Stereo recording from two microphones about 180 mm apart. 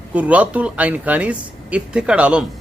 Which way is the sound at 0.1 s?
10° right (ahead or behind).